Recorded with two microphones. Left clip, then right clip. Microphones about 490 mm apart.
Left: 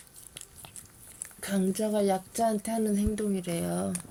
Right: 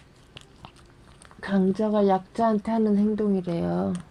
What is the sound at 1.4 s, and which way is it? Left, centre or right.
A woman's voice, left.